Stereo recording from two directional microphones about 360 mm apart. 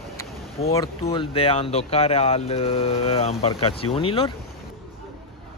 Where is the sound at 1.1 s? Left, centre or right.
Centre.